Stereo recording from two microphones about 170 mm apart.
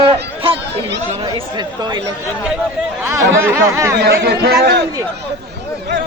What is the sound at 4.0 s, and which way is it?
Speech, 70° right (ahead or behind).